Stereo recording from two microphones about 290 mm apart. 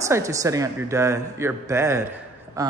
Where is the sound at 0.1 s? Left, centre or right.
Centre.